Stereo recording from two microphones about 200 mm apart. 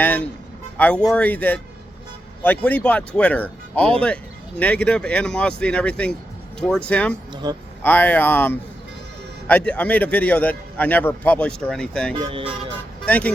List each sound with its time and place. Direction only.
0.0 s a man's voice: 10° left (ahead or behind)
7.4 s speech: 20° right (ahead or behind)
7.8 s a man's voice: 10° left (ahead or behind)
12.1 s speech: 25° right (ahead or behind)
13.1 s a man's voice: 5° left (ahead or behind)